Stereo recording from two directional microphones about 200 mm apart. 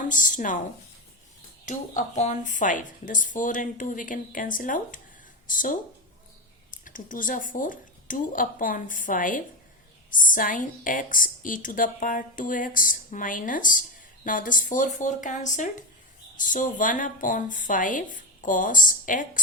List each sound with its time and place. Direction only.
0.0 s a woman's voice: 40° left (ahead or behind)
1.6 s a woman's voice: 40° left (ahead or behind)